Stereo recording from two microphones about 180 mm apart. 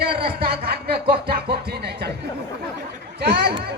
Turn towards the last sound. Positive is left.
turn(degrees=-65)  # may be behind; listen again after turning